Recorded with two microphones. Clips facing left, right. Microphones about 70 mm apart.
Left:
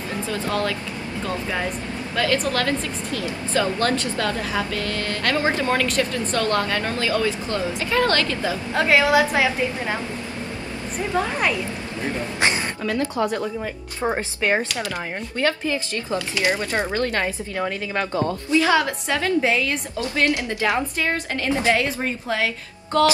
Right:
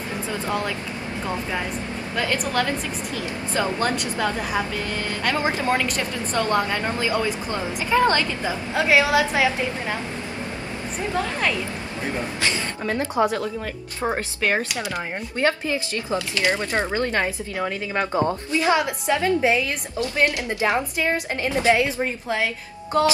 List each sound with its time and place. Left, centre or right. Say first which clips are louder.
0.3 s a woman's voice: left 2 dB; centre
8.7 s a woman's voice: left 1 dB; centre
11.1 s a woman's voice: left 2 dB; centre
12.8 s a woman's voice: right 2 dB; right
14.0 s a woman's voice: left 1 dB; centre
15.3 s a woman's voice: even; right
22.9 s a woman's voice: left 2 dB; centre